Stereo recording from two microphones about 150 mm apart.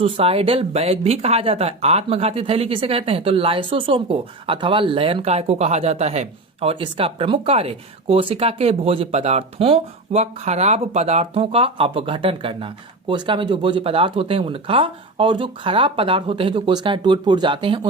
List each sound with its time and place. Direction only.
0.0 s speech: 40° right (ahead or behind)